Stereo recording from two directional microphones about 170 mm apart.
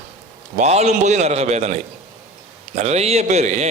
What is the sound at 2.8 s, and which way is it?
Speech, 40° right (ahead or behind).